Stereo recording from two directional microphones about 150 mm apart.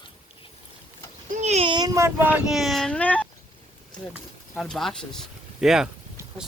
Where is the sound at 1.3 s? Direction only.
50° right (ahead or behind).